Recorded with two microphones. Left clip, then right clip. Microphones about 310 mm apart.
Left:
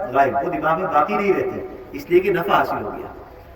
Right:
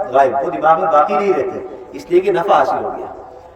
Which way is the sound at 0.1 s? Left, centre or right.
Right.